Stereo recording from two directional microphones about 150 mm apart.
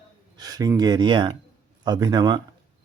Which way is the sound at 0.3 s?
25° right (ahead or behind).